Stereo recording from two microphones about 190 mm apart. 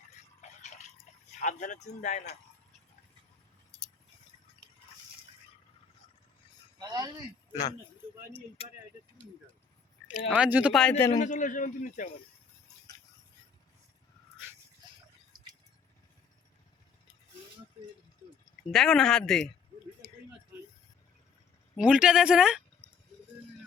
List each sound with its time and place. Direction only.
1.4 s a man's voice: 40° left (ahead or behind)
6.7 s a sound: 20° right (ahead or behind)
8.6 s a man's voice: 30° left (ahead or behind)
10.2 s speech: 5° right (ahead or behind)
11.1 s a man's voice: 40° left (ahead or behind)
18.7 s speech: 5° left (ahead or behind)
21.8 s speech: 5° right (ahead or behind)